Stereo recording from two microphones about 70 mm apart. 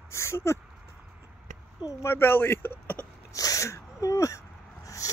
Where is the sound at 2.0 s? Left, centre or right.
Left.